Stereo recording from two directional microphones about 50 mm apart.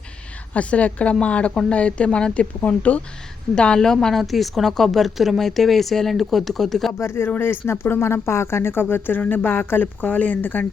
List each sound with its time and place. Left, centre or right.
0.5 s speech: left
2.6 s speech: left
3.5 s a woman's voice: centre
7.0 s speech: left
7.3 s speech: left